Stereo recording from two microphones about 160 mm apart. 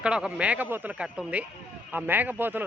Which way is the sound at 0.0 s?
5° right (ahead or behind).